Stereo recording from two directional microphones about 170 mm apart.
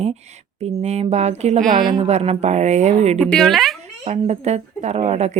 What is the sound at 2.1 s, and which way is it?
Speech, 40° right (ahead or behind).